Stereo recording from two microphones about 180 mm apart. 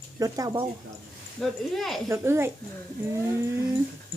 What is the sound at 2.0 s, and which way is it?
Speech, 15° right (ahead or behind).